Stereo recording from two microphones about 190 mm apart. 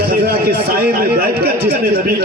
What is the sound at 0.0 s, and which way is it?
A man's voice, 55° right (ahead or behind).